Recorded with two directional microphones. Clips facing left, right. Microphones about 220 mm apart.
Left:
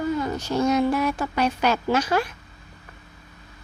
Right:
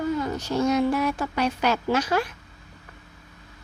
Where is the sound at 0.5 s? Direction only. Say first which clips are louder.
Left 1 dB; 35° left (ahead or behind).